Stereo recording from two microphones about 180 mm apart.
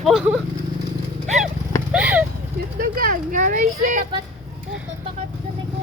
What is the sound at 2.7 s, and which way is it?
Speech, 50° right (ahead or behind).